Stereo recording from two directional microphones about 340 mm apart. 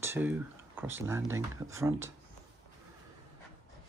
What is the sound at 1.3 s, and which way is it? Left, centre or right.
Speech, centre.